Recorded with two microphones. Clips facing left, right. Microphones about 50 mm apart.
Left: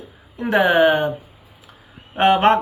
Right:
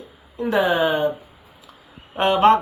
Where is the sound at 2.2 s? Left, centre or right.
Left.